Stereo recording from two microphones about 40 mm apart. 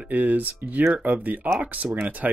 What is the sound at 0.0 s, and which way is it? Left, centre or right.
Speech, right.